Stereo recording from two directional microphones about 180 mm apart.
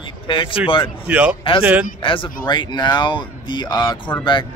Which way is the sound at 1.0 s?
5° right (ahead or behind).